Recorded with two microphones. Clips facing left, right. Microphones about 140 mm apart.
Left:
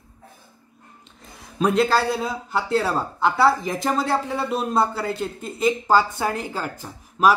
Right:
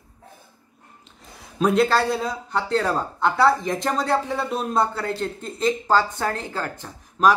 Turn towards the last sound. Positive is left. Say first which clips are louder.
# even
turn(degrees=10)  # may be behind; listen again after turning